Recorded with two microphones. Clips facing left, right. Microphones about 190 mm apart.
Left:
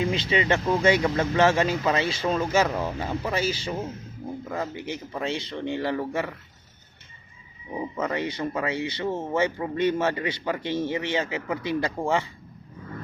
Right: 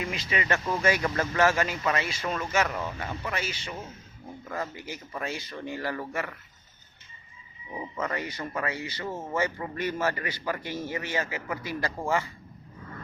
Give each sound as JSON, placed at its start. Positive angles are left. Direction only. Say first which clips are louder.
{"t": 0.0, "sound": "speech", "louder": "left 7 dB", "side_deg": 30}
{"t": 4.4, "sound": "speech", "louder": "left 2 dB", "side_deg": 15}
{"t": 7.9, "sound": "speech", "louder": "left 4 dB", "side_deg": 20}